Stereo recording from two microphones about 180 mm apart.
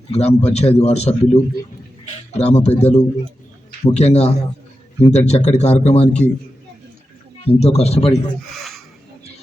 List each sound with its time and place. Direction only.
0.1 s a man's voice: 35° left (ahead or behind)
7.4 s a man's voice: 35° left (ahead or behind)